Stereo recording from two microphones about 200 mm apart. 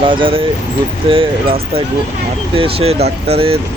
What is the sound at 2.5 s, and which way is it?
Speech, 30° right (ahead or behind).